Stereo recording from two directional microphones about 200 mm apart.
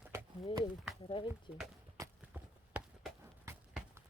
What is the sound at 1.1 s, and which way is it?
Speech, 25° left (ahead or behind).